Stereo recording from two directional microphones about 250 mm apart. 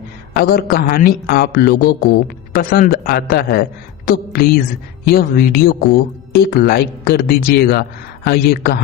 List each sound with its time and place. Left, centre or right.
0.3 s speech: left